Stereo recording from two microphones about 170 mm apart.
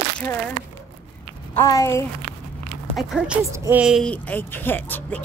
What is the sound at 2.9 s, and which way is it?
Speech, 5° right (ahead or behind).